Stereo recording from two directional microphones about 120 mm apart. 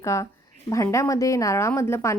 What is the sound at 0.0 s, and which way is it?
A woman's voice, 25° left (ahead or behind).